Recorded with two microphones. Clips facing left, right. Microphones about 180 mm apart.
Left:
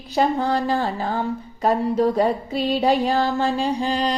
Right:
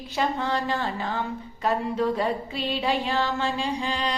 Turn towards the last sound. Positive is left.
turn(degrees=40)  # may be behind; listen again after turning